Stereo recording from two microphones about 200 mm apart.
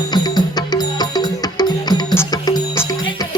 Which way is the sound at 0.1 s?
20° left (ahead or behind).